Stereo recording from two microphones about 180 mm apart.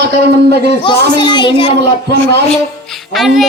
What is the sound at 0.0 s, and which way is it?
Speech, 65° right (ahead or behind).